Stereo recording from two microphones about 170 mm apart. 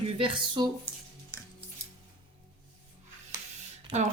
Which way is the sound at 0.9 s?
10° left (ahead or behind).